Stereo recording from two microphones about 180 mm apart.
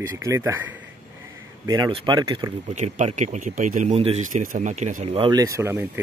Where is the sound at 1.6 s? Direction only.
20° right (ahead or behind).